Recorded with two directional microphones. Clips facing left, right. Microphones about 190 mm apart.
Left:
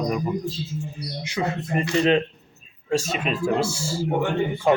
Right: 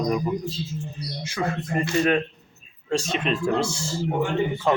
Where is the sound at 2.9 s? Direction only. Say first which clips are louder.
Even; 5° left (ahead or behind).